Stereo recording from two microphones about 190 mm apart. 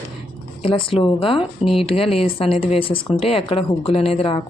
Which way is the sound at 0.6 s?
30° left (ahead or behind).